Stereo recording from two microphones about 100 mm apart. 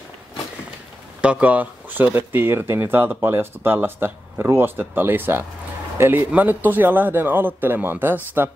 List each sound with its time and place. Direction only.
1.2 s speech: 10° right (ahead or behind)